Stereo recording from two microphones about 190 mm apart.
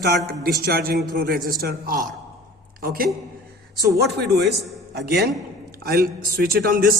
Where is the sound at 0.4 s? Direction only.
55° right (ahead or behind).